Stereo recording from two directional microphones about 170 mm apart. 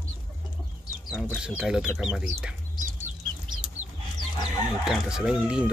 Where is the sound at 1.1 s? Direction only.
5° right (ahead or behind).